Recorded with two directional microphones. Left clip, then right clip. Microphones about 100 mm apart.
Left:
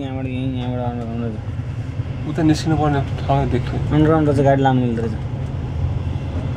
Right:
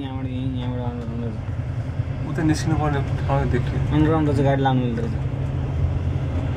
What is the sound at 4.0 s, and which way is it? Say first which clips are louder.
Speech: left 5 dB; 20° left (ahead or behind).